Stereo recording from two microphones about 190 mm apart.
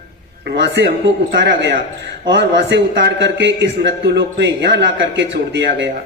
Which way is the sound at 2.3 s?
65° right (ahead or behind).